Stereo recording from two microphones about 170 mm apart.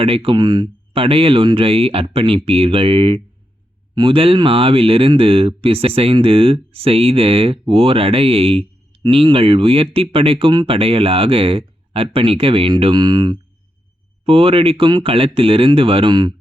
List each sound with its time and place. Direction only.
0.0 s speech: 35° right (ahead or behind)